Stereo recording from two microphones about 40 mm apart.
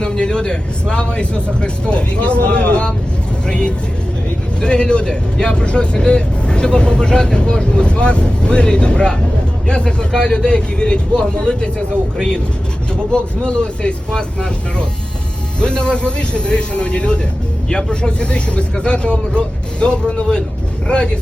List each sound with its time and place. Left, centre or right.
0.0 s speech: centre
13.1 s speech: left
15.6 s speech: left
17.7 s speech: centre